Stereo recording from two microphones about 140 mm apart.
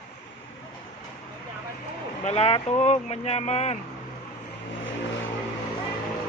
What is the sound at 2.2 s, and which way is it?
Speech, 45° left (ahead or behind).